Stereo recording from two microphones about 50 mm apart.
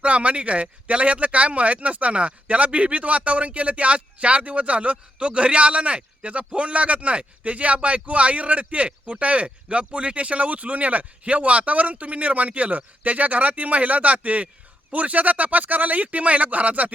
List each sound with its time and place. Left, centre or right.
0.0 s speech: right